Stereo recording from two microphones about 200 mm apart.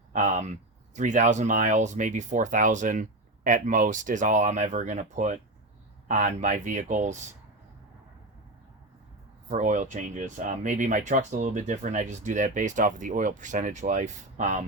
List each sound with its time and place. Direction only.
0.1 s speech: 35° right (ahead or behind)
9.5 s speech: 40° right (ahead or behind)